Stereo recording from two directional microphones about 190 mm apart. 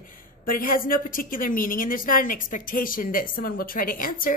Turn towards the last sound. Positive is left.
turn(degrees=45)  # may be behind; listen again after turning